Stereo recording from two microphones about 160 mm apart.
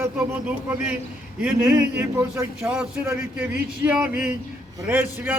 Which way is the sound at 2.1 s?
15° right (ahead or behind).